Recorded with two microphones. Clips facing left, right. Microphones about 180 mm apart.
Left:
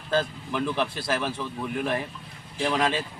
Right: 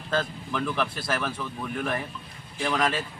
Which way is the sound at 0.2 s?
20° left (ahead or behind).